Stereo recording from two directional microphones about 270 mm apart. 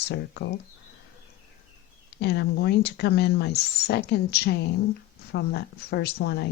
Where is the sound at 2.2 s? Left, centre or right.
Left.